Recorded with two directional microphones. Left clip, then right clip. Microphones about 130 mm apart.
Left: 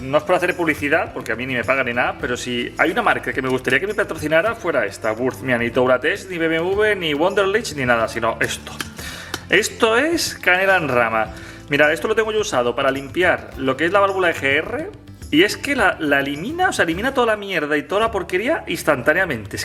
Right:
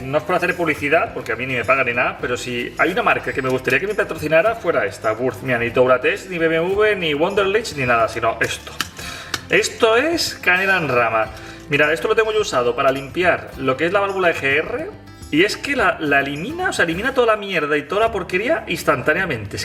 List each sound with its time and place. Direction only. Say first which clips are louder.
0.1 s speech: left 1 dB; 40° left (ahead or behind)